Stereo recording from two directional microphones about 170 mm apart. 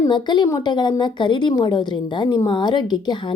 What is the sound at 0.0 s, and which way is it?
Speech, 25° left (ahead or behind).